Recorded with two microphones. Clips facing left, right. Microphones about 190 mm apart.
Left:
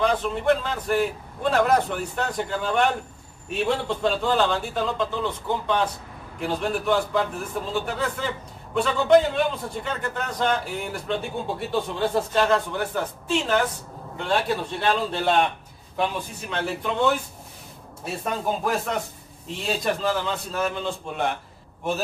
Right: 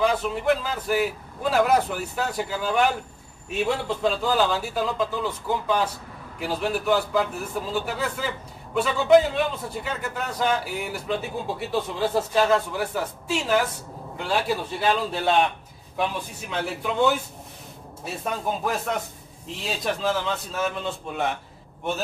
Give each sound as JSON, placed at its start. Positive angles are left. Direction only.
{"t": 0.0, "sound": "a man's voice", "side_deg": -5}